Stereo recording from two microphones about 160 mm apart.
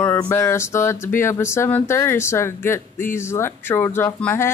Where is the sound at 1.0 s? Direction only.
15° left (ahead or behind).